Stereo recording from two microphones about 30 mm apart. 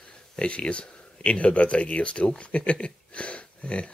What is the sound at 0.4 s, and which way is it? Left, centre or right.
Speech, left.